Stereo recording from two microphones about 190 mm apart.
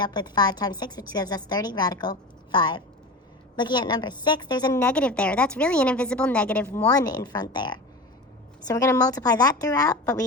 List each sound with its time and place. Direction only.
0.0 s a woman's voice: 20° left (ahead or behind)
4.8 s a woman's voice: 5° left (ahead or behind)